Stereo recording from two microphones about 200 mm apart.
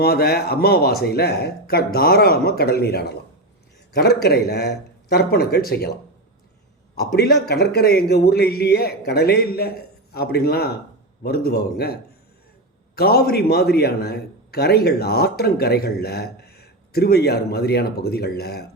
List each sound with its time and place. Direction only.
0.0 s a man's voice: 50° left (ahead or behind)
7.2 s a man's voice: 55° left (ahead or behind)
13.0 s a man's voice: 50° left (ahead or behind)